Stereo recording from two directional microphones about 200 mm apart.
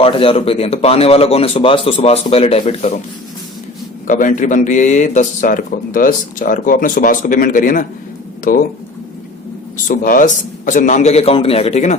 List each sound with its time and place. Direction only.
0.0 s a man's voice: 25° left (ahead or behind)
4.0 s a man's voice: 40° left (ahead or behind)
9.9 s a man's voice: 45° left (ahead or behind)